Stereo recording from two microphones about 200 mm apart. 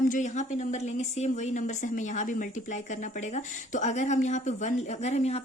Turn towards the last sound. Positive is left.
turn(degrees=35)  # may be behind; listen again after turning